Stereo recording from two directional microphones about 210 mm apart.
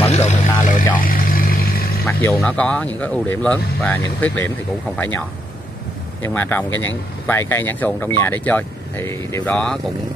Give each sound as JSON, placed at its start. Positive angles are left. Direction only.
{"t": 0.0, "sound": "a sound", "side_deg": 30}
{"t": 1.0, "sound": "vehicle", "side_deg": 45}
{"t": 2.3, "sound": "speech", "side_deg": 5}
{"t": 6.2, "sound": "speech", "side_deg": 10}